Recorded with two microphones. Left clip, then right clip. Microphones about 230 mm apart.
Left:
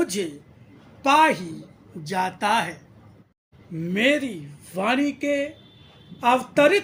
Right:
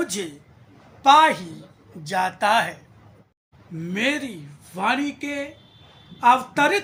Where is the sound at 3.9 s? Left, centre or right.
Centre.